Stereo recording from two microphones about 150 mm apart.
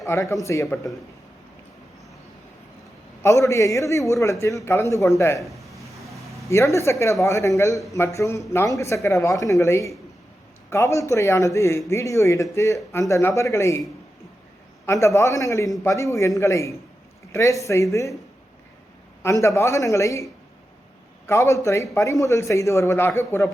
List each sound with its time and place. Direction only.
0.0 s a man's voice: 20° left (ahead or behind)
3.2 s a man's voice: 20° left (ahead or behind)
5.4 s a sound: centre (ahead or behind)
6.5 s a man's voice: 20° left (ahead or behind)
15.0 s a man's voice: 20° left (ahead or behind)
19.2 s a man's voice: 20° left (ahead or behind)
21.2 s a man's voice: 20° left (ahead or behind)